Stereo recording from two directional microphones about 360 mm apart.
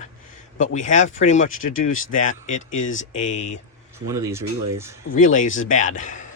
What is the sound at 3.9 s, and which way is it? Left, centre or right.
Speech, centre.